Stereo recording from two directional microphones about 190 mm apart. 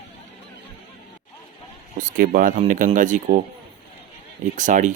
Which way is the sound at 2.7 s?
45° right (ahead or behind).